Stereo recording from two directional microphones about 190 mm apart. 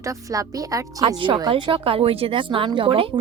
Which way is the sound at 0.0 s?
15° right (ahead or behind).